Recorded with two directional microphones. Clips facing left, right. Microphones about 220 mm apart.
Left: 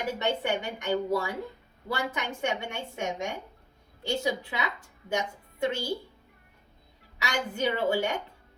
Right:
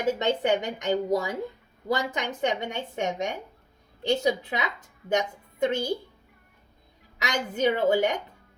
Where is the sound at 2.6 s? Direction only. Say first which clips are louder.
Right 4 dB; 20° right (ahead or behind).